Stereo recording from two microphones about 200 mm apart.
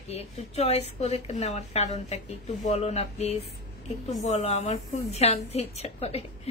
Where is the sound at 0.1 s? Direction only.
30° left (ahead or behind).